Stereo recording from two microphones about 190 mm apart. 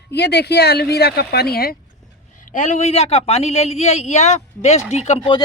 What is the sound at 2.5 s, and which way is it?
A man's voice, 40° left (ahead or behind).